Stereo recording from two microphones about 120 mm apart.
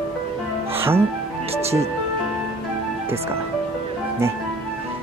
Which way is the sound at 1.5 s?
60° right (ahead or behind).